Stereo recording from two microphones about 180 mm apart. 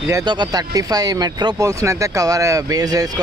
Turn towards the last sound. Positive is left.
turn(degrees=-20)  # may be behind; listen again after turning